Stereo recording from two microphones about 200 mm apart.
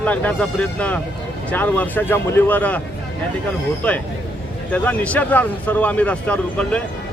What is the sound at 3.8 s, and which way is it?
A man's voice, 5° left (ahead or behind).